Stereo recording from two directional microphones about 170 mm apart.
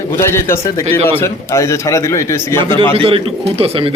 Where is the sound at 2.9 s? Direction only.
35° right (ahead or behind).